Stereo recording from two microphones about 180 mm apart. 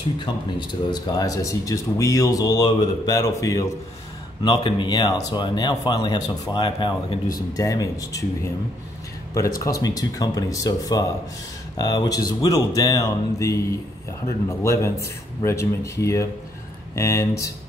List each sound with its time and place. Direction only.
0.2 s speech: 25° left (ahead or behind)
9.6 s speech: 20° left (ahead or behind)